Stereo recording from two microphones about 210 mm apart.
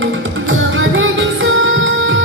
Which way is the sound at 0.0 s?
65° right (ahead or behind).